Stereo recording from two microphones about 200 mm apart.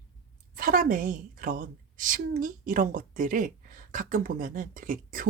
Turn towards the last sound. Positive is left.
turn(degrees=-45)  # may be behind; listen again after turning